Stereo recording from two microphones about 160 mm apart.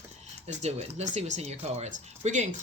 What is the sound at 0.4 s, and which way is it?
Speech, 45° right (ahead or behind).